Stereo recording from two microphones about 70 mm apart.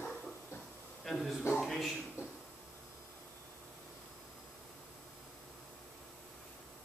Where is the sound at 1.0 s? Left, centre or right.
Centre.